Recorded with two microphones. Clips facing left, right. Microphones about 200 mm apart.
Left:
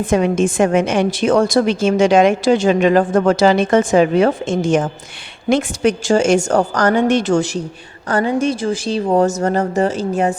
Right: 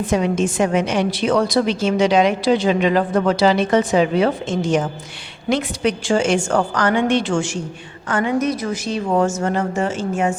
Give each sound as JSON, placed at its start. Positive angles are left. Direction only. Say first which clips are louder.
{"t": 0.0, "sound": "a woman's voice", "louder": "left 3 dB", "side_deg": 50}